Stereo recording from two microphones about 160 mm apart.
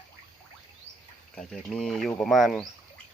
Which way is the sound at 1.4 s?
5° left (ahead or behind).